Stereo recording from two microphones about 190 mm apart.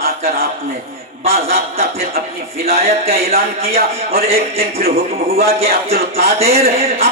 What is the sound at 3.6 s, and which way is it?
A man's voice, 30° right (ahead or behind).